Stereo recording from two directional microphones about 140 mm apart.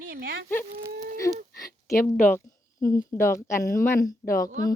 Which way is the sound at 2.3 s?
25° left (ahead or behind).